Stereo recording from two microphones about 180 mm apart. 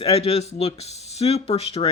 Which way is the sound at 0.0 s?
35° left (ahead or behind).